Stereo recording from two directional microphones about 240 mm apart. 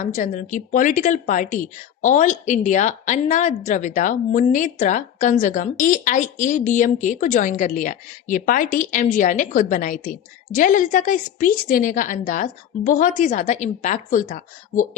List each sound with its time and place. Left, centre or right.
0.0 s speech: left